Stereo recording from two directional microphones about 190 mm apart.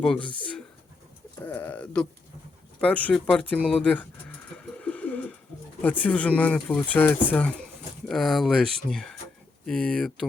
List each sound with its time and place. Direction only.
0.0 s speech: 5° left (ahead or behind)
4.5 s bird: 5° left (ahead or behind)
5.8 s speech: 10° left (ahead or behind)